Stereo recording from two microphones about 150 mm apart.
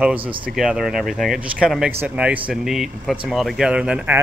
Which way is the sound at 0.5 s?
Centre (ahead or behind).